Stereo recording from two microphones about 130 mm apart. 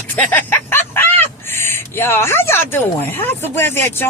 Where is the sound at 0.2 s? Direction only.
15° left (ahead or behind).